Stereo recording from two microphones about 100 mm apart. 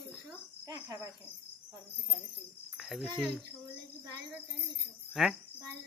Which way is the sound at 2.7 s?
Centre (ahead or behind).